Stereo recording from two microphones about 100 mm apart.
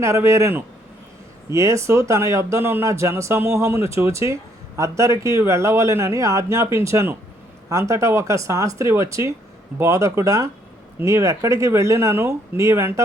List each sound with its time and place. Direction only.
0.0 s speech: 30° right (ahead or behind)